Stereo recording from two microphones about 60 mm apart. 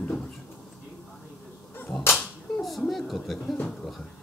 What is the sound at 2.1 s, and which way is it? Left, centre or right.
Whip, centre.